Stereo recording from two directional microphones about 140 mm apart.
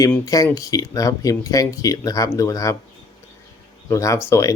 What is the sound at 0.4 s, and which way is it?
Speech, 25° left (ahead or behind).